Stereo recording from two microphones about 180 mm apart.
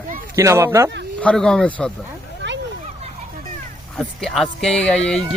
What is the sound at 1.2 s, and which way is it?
Speech, 5° left (ahead or behind).